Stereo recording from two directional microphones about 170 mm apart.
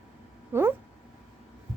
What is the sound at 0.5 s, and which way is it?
Speech, 15° right (ahead or behind).